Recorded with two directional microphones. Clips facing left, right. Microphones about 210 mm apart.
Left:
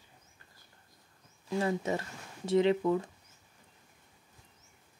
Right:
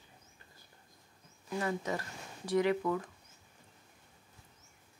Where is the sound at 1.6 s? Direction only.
25° left (ahead or behind).